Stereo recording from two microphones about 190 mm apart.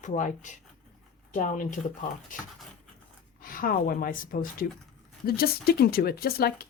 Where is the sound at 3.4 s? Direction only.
50° left (ahead or behind).